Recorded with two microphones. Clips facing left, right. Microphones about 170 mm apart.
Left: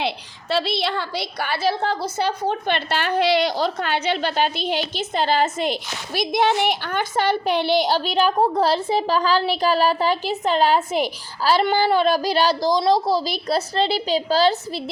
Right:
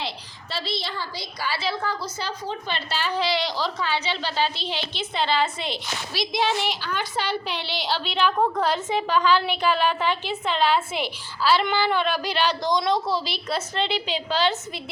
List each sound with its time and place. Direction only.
0.5 s a woman's voice: 65° left (ahead or behind)
1.8 s a woman's voice: 70° left (ahead or behind); by 14.6 s 35° left (ahead or behind)